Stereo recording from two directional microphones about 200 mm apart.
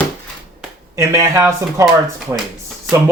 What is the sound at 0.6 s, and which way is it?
Speech, 10° right (ahead or behind).